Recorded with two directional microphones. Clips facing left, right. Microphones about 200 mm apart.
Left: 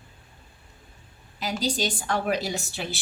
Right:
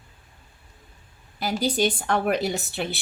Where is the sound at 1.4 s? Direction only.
55° right (ahead or behind).